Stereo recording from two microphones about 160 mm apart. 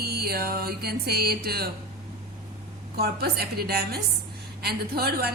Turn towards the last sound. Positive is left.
turn(degrees=-80)